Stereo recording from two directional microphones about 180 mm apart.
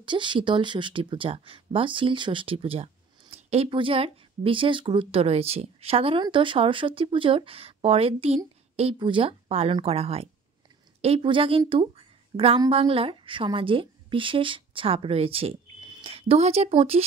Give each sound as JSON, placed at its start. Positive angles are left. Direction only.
{"t": 0.0, "sound": "a woman's voice", "side_deg": -25}